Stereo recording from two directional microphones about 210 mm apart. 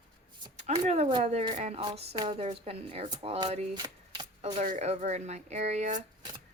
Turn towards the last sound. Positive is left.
turn(degrees=-35)  # may be behind; listen again after turning